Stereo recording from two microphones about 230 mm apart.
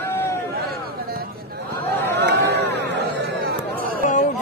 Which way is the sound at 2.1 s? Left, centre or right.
Right.